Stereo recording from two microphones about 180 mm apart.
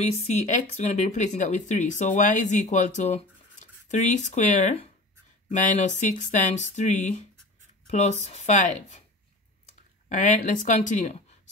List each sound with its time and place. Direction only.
0.3 s speech: 40° left (ahead or behind)
7.8 s a sound: 40° left (ahead or behind)
8.2 s speech: 40° left (ahead or behind)
10.0 s speech: 45° left (ahead or behind)